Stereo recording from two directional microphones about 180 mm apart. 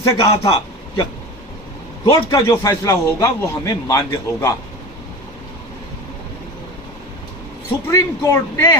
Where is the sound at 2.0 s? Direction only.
20° left (ahead or behind).